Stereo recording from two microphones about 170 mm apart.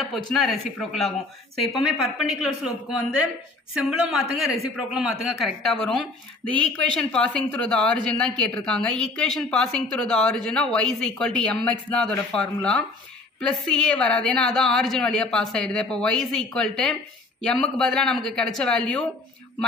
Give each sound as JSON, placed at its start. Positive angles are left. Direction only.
{"t": 0.0, "sound": "speech", "side_deg": 0}
{"t": 2.2, "sound": "speech", "side_deg": -5}